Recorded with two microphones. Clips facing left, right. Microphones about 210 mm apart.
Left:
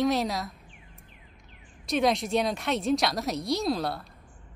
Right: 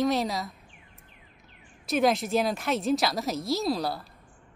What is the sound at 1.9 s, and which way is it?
A woman's voice, centre (ahead or behind).